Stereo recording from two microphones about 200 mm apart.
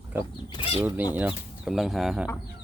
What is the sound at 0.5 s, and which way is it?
Speech, 25° left (ahead or behind).